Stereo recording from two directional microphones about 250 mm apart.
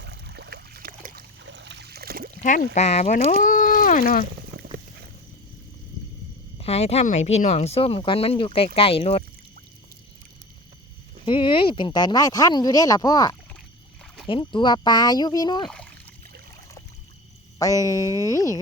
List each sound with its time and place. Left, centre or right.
0.0 s a sound: right
2.4 s speech: left
6.6 s speech: left
11.3 s speech: centre
17.6 s speech: centre